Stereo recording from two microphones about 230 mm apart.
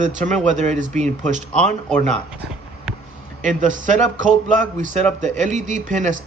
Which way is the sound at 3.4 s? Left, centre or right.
Right.